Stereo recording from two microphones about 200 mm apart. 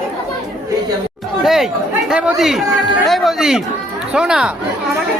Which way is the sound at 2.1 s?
Centre (ahead or behind).